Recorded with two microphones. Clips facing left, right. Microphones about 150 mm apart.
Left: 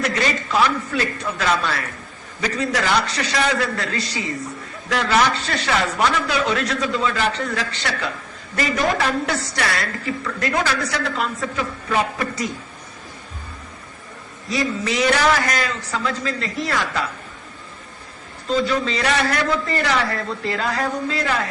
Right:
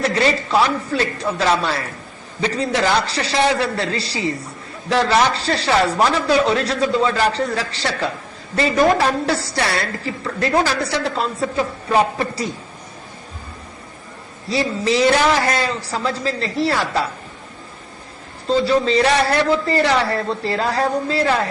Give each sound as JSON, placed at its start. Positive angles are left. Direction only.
{"t": 0.0, "sound": "a woman's voice", "side_deg": -30}
{"t": 14.5, "sound": "a woman's voice", "side_deg": -30}
{"t": 18.4, "sound": "a woman's voice", "side_deg": -30}